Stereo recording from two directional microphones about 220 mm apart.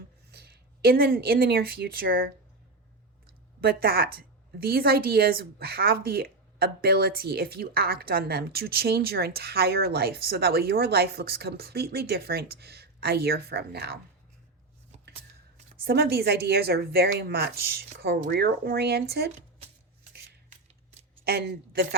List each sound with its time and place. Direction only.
0.3 s speech: 45° right (ahead or behind)
3.6 s speech: 45° right (ahead or behind)
15.8 s speech: 45° right (ahead or behind)
21.2 s speech: 45° right (ahead or behind)